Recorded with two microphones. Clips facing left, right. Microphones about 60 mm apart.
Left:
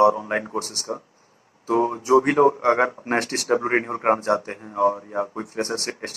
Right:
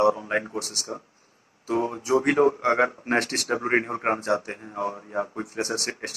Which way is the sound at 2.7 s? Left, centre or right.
Left.